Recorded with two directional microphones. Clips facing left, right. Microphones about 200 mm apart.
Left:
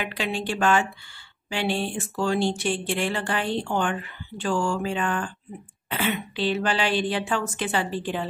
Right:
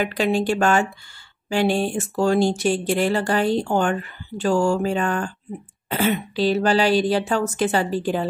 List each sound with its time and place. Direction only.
0.0 s speech: 45° right (ahead or behind)